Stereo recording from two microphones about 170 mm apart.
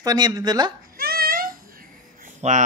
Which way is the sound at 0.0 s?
20° right (ahead or behind).